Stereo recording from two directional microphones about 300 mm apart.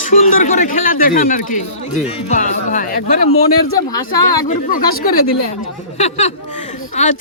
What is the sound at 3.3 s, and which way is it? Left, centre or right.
Speech, left.